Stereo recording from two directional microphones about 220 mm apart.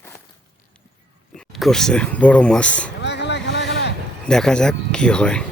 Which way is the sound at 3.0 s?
50° left (ahead or behind).